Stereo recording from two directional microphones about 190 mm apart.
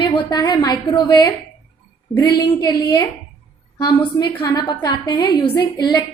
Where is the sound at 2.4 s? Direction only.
20° left (ahead or behind).